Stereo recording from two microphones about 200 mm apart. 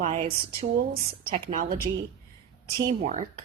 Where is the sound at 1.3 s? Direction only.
30° right (ahead or behind).